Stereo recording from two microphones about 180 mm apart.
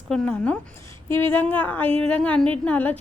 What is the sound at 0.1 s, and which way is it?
A woman's voice, 5° left (ahead or behind).